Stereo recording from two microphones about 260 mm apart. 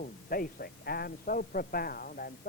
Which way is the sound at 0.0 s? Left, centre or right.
Left.